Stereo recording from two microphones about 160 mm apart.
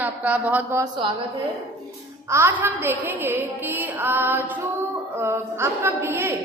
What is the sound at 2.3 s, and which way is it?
A woman's voice, 15° right (ahead or behind).